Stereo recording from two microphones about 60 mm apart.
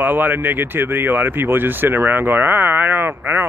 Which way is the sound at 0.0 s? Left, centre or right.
Right.